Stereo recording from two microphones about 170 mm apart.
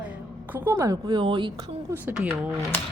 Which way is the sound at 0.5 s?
15° right (ahead or behind).